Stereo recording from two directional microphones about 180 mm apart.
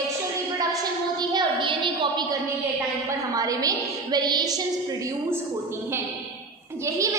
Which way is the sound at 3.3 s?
20° right (ahead or behind).